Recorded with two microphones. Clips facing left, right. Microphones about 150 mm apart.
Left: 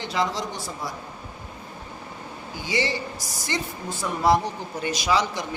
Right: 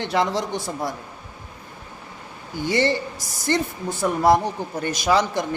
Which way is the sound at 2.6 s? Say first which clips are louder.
Right 6 dB; 55° right (ahead or behind).